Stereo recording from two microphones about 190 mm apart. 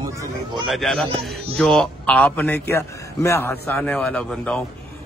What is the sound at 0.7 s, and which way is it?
A man's voice, centre (ahead or behind).